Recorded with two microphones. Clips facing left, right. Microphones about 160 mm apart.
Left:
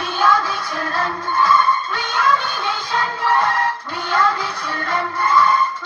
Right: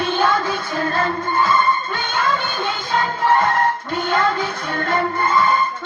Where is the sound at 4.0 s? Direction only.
25° right (ahead or behind).